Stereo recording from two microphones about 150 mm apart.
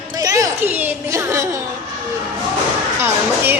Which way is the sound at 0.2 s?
20° right (ahead or behind).